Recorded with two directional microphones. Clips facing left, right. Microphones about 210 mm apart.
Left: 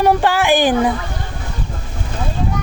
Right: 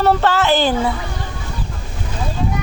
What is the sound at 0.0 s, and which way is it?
Speech, 15° left (ahead or behind).